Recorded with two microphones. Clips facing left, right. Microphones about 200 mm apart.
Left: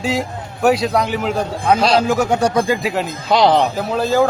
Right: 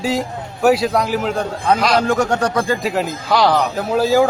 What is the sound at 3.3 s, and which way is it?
Speech, 20° left (ahead or behind).